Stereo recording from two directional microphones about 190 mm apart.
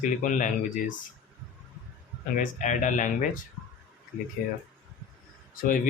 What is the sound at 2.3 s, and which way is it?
Speech, 45° left (ahead or behind).